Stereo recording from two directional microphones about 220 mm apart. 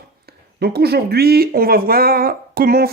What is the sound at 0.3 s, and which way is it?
Speech, 45° right (ahead or behind).